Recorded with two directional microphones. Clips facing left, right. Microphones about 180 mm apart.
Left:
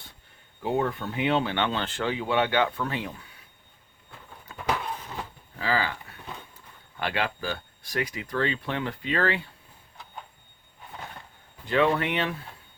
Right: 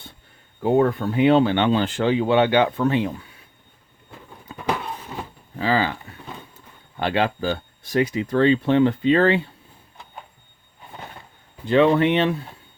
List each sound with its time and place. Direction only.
0.6 s speech: 50° right (ahead or behind)
1.5 s speech: 15° right (ahead or behind)
2.0 s speech: 25° right (ahead or behind)
5.5 s speech: 25° right (ahead or behind)
6.9 s speech: 25° right (ahead or behind)
11.6 s speech: 25° right (ahead or behind)